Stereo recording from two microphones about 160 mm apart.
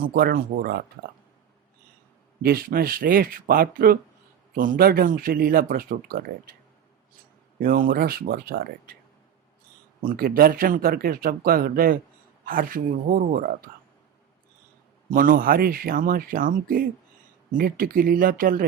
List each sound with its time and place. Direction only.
0.0 s speech: 70° right (ahead or behind)
2.4 s speech: 70° right (ahead or behind)
7.6 s speech: 60° right (ahead or behind)
10.0 s speech: 60° right (ahead or behind)
15.1 s speech: 60° right (ahead or behind)